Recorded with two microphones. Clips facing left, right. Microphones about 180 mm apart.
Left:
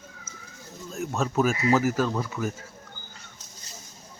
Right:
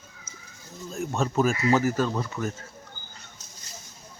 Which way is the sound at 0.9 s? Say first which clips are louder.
Even; 5° left (ahead or behind).